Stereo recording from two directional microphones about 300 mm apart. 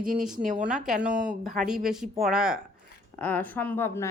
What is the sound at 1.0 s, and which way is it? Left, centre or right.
A woman's voice, centre.